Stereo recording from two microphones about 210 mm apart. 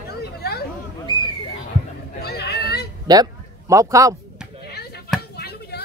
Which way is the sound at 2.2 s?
50° left (ahead or behind).